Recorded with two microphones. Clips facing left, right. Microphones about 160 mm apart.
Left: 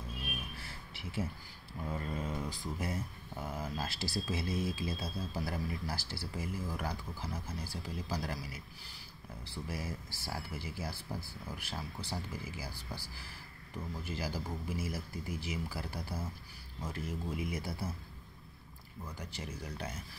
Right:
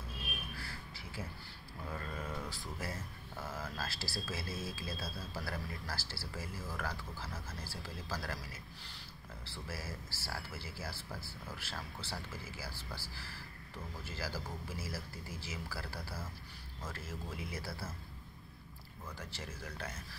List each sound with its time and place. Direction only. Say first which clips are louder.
0.6 s a sound: even; 20° left (ahead or behind)
1.9 s speech: left 4 dB; 20° left (ahead or behind)
19.1 s speech: left 3 dB; 15° left (ahead or behind)